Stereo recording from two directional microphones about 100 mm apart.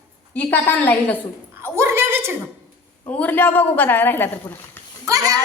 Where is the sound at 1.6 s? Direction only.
25° right (ahead or behind).